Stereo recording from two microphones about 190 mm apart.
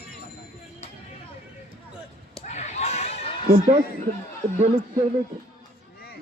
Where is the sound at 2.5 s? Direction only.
35° left (ahead or behind).